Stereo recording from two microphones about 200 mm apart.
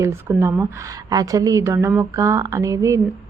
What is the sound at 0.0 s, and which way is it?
A woman's voice, 10° right (ahead or behind).